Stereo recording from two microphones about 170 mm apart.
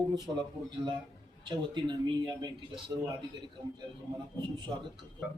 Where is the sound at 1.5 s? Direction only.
25° right (ahead or behind).